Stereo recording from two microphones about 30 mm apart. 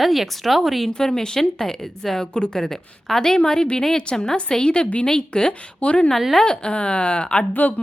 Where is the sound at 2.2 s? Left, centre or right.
Left.